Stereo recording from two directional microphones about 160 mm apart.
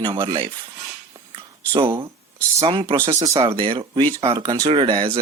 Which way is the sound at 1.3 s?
35° right (ahead or behind).